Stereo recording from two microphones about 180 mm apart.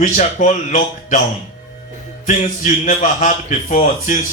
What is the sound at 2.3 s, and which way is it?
A man's voice, 40° left (ahead or behind).